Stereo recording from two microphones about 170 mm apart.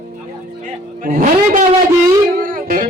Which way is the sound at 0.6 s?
55° right (ahead or behind).